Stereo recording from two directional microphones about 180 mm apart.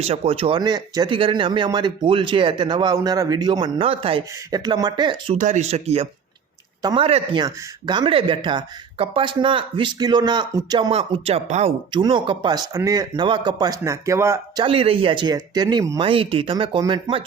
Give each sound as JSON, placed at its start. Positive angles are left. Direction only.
{"t": 0.0, "sound": "speech", "side_deg": -35}
{"t": 5.4, "sound": "speech", "side_deg": -40}
{"t": 16.0, "sound": "speech", "side_deg": -30}